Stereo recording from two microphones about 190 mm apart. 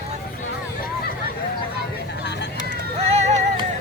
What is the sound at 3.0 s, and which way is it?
Music, 35° right (ahead or behind).